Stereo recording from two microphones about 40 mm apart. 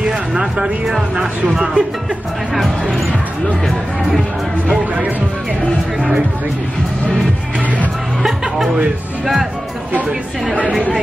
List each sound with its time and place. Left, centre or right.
0.1 s a sound: centre
0.8 s speech: centre
2.5 s speech: centre
8.2 s music: centre
9.2 s speech: centre